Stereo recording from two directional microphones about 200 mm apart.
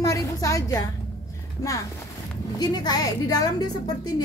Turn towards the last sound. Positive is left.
turn(degrees=20)  # may be behind; listen again after turning